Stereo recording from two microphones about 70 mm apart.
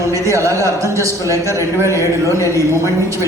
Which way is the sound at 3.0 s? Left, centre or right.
Right.